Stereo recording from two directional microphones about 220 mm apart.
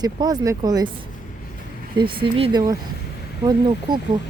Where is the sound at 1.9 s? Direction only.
20° right (ahead or behind).